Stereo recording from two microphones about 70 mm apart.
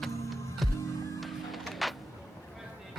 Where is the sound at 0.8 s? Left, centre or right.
Left.